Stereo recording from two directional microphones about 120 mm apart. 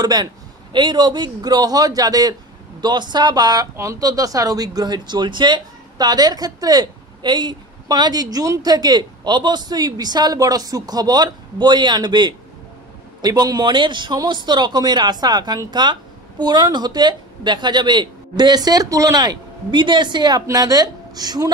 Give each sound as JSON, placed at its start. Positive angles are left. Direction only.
{"t": 0.0, "sound": "speech", "side_deg": -35}